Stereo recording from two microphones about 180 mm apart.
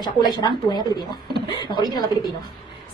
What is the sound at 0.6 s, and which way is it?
A woman's voice, 25° left (ahead or behind).